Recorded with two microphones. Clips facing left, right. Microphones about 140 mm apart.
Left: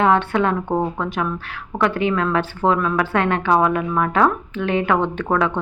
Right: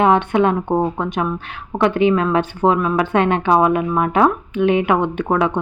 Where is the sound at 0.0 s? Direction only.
20° right (ahead or behind).